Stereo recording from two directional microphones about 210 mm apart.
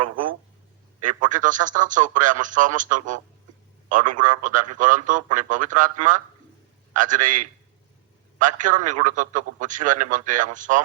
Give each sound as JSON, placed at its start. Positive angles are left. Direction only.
{"t": 1.0, "sound": "a man's voice", "side_deg": -40}